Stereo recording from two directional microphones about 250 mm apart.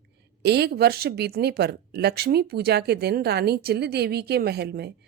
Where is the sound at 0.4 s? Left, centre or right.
Right.